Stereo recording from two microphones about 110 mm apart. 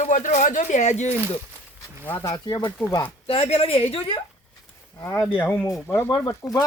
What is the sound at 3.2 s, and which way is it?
Speech, 65° left (ahead or behind).